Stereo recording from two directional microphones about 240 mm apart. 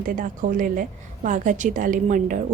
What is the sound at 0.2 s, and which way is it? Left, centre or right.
A woman's voice, right.